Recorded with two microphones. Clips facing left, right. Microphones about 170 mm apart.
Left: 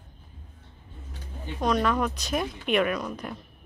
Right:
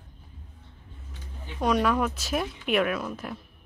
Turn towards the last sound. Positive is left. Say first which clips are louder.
# even
turn(degrees=-5)  # may be behind; listen again after turning